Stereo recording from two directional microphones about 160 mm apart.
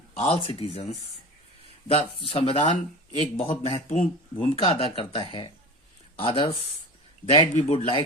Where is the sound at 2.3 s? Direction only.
35° left (ahead or behind).